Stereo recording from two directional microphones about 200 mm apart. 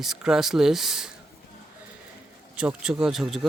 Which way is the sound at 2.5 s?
5° right (ahead or behind).